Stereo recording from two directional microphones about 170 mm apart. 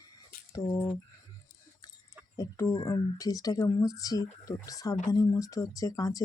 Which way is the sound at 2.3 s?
20° left (ahead or behind).